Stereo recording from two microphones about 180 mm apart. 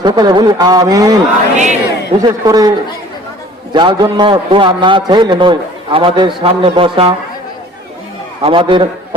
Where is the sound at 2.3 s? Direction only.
20° right (ahead or behind).